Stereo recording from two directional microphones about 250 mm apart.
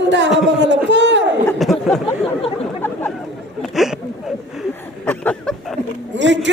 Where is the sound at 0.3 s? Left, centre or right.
Centre.